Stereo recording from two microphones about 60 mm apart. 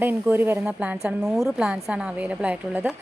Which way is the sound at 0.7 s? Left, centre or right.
Right.